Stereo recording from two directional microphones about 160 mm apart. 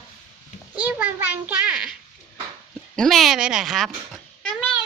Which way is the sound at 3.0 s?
Centre (ahead or behind).